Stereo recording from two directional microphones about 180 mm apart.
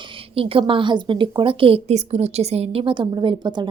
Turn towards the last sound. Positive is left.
turn(degrees=-25)  # may be behind; listen again after turning